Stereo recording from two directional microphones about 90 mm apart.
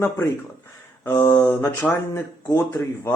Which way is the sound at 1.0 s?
25° left (ahead or behind).